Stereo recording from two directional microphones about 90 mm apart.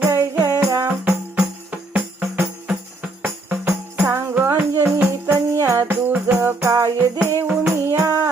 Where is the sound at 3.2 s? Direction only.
30° right (ahead or behind).